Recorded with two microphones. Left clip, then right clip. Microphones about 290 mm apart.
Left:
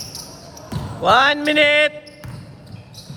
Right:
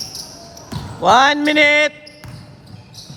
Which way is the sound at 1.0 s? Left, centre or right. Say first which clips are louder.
Right 2 dB; right.